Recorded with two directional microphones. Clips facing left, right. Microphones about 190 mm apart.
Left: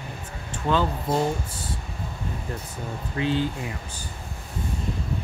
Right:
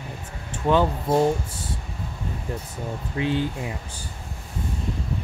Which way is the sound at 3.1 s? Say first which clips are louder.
Even; 20° right (ahead or behind).